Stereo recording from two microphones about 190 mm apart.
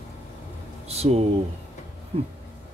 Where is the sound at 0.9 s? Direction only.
35° right (ahead or behind).